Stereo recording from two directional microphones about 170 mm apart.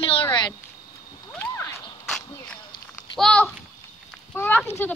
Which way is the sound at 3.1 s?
5° left (ahead or behind).